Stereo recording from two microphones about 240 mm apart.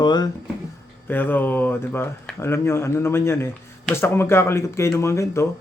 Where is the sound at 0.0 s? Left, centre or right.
Centre.